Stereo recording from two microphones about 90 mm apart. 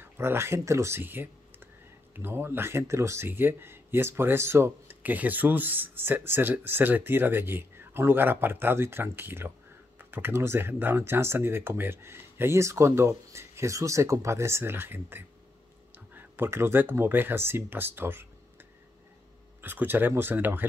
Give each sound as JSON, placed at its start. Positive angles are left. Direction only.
{"t": 0.0, "sound": "speech", "side_deg": -25}
{"t": 5.0, "sound": "speech", "side_deg": -20}
{"t": 19.6, "sound": "speech", "side_deg": -20}